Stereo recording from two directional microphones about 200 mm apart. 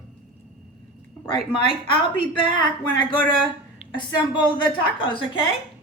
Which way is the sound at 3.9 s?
25° left (ahead or behind).